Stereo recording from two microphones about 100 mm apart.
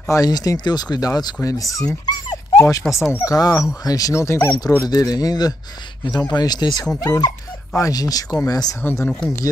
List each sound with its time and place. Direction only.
0.1 s speech: 40° left (ahead or behind)
2.0 s dog: 45° left (ahead or behind)
2.8 s speech: 5° left (ahead or behind)
3.3 s speech: 40° left (ahead or behind)
8.9 s speech: 25° left (ahead or behind)